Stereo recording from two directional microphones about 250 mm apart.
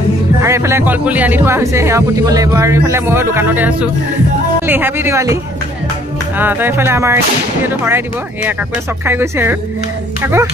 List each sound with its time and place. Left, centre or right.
0.4 s speech: centre
9.0 s speech: centre